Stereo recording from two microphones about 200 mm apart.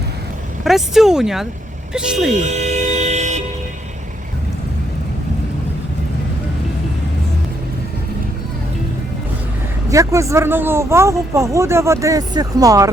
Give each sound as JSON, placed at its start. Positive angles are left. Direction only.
{"t": 0.6, "sound": "speech", "side_deg": 0}
{"t": 2.3, "sound": "toot", "side_deg": -35}
{"t": 9.9, "sound": "speech", "side_deg": -15}